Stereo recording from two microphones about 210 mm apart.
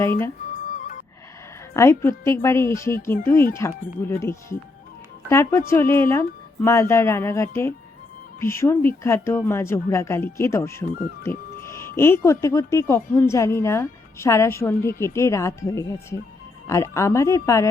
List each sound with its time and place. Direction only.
0.0 s a woman's voice: 10° left (ahead or behind)
0.5 s music: 35° left (ahead or behind)
1.7 s a woman's voice: 15° left (ahead or behind)